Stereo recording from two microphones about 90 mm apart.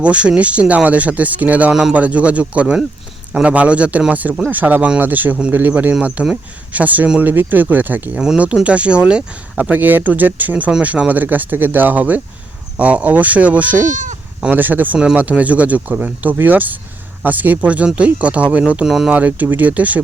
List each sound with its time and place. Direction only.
0.0 s speech: 15° right (ahead or behind)
19.1 s speech: 15° right (ahead or behind)